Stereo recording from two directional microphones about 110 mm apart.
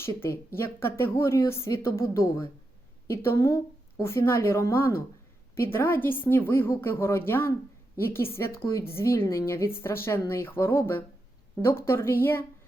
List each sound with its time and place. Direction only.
0.0 s speech: 20° left (ahead or behind)